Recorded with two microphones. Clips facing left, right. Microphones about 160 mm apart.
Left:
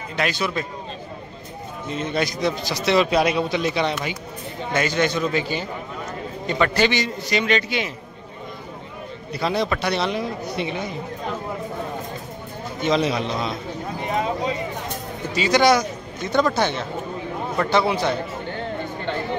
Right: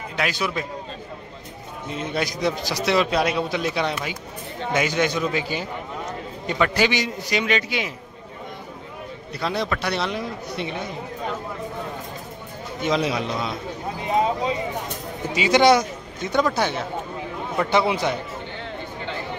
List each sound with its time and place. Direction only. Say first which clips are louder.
0.1 s a man's voice: left 2 dB; 10° right (ahead or behind)
1.9 s a man's voice: left 2 dB; 10° right (ahead or behind)
9.3 s a man's voice: left 3 dB; centre (ahead or behind)
12.8 s a man's voice: left 2 dB; 5° right (ahead or behind)
15.3 s speech: right 1 dB; 20° right (ahead or behind)
15.8 s a man's voice: left 1 dB; 10° right (ahead or behind)